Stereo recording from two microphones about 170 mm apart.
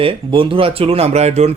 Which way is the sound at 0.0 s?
30° right (ahead or behind).